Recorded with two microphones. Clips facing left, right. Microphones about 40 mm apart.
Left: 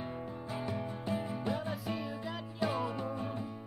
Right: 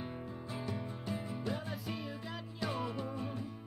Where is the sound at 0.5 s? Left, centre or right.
Centre.